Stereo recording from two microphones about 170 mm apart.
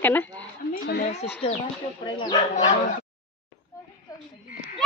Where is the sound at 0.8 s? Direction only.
65° left (ahead or behind).